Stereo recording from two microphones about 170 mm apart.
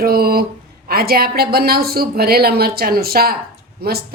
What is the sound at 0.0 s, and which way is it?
A woman's voice, 60° right (ahead or behind).